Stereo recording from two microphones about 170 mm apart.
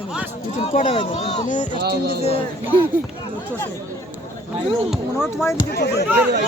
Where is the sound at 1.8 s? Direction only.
70° right (ahead or behind).